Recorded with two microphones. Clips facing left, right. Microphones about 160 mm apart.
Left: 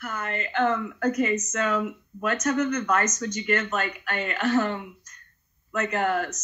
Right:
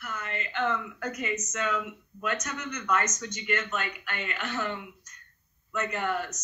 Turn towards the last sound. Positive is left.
turn(degrees=90)